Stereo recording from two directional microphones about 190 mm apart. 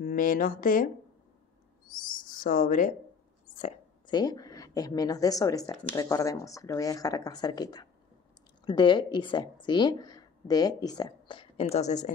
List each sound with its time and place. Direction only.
0.0 s speech: 45° left (ahead or behind)
2.2 s speech: 45° left (ahead or behind)
4.1 s a woman's voice: 20° left (ahead or behind)
11.7 s a woman's voice: 35° left (ahead or behind)